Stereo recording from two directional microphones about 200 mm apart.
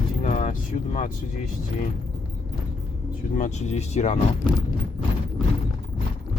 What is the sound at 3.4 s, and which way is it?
Speech, 35° left (ahead or behind).